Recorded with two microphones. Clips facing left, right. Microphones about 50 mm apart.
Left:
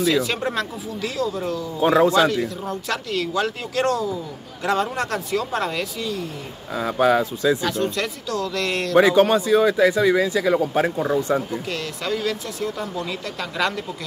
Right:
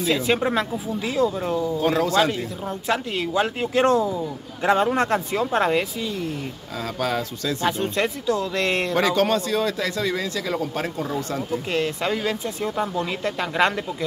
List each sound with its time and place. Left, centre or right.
0.1 s speech: right
1.8 s speech: left
2.6 s speech: centre
6.8 s speech: centre
7.6 s speech: right
8.9 s a man's voice: centre
11.7 s speech: right